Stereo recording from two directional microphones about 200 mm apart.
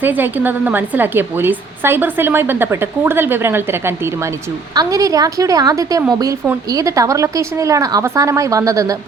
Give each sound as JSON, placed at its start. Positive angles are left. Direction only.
{"t": 0.0, "sound": "a woman's voice", "side_deg": -10}